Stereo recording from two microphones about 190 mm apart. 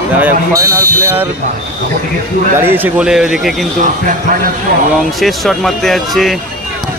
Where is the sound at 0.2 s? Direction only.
15° right (ahead or behind).